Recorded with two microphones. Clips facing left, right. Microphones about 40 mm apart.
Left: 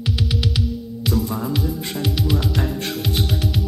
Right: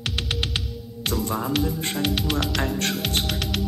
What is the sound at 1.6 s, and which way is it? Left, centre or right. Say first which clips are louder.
Speech: even; centre.